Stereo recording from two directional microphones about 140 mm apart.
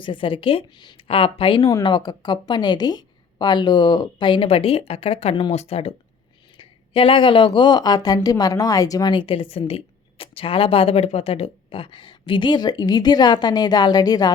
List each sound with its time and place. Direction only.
0.0 s a woman's voice: 35° left (ahead or behind)